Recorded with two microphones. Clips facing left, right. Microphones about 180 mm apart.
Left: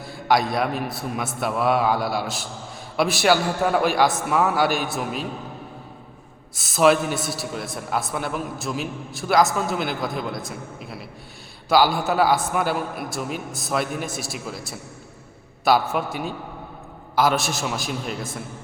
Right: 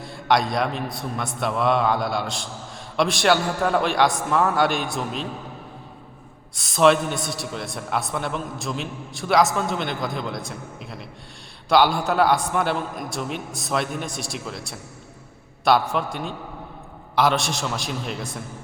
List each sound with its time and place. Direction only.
0.0 s a man's voice: centre (ahead or behind)
6.6 s a man's voice: 5° left (ahead or behind)